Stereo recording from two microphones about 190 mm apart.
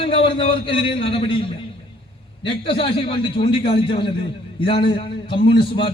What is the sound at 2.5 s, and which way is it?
A man's voice, 30° left (ahead or behind).